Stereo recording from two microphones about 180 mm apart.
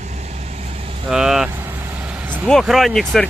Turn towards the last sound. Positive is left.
turn(degrees=0)  # may be behind; listen again after turning